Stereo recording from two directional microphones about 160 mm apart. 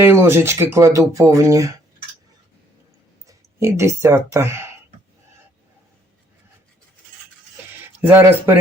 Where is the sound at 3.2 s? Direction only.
20° right (ahead or behind).